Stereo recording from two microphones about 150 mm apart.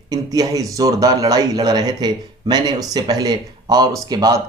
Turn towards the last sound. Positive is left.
turn(degrees=-25)  # may be behind; listen again after turning